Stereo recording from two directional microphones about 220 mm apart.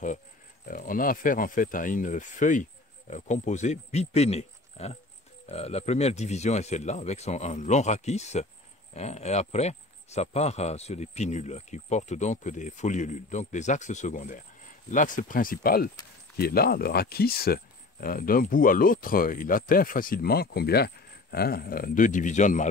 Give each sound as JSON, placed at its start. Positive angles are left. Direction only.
{"t": 0.7, "sound": "speech", "side_deg": 40}